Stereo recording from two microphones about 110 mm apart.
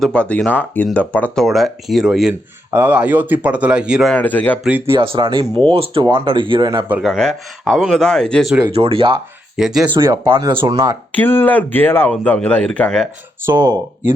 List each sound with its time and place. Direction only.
0.0 s speech: 10° left (ahead or behind)
1.5 s speech: centre (ahead or behind)
2.6 s speech: 20° right (ahead or behind)
4.1 s speech: 15° left (ahead or behind)
4.9 s speech: 55° right (ahead or behind)
7.0 s speech: 5° left (ahead or behind)
8.7 s speech: 60° right (ahead or behind)
9.6 s speech: 5° right (ahead or behind)
10.0 s speech: 25° right (ahead or behind)
11.1 s speech: 15° left (ahead or behind)
13.4 s speech: 20° right (ahead or behind)